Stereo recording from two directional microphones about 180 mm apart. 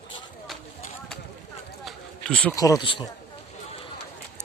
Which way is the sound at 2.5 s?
20° left (ahead or behind).